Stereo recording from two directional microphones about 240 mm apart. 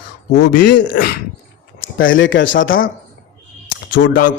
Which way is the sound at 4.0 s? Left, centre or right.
Left.